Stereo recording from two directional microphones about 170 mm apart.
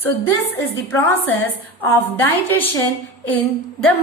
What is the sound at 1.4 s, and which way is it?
Speech, 10° left (ahead or behind).